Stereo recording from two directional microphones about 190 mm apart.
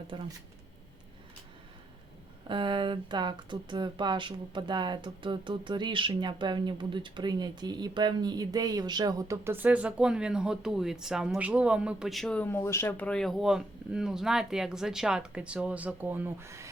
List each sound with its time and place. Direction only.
0.1 s speech: 25° right (ahead or behind)
2.5 s speech: 25° right (ahead or behind)